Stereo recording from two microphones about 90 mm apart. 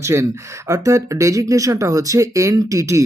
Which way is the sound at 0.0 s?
35° right (ahead or behind).